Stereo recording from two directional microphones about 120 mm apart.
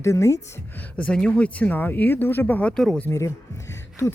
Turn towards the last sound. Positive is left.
turn(degrees=25)  # may be behind; listen again after turning